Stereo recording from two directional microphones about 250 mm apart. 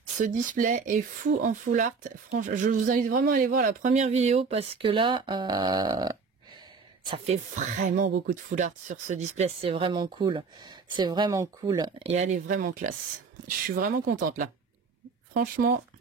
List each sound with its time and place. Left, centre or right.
0.2 s a woman's voice: right
7.1 s a woman's voice: right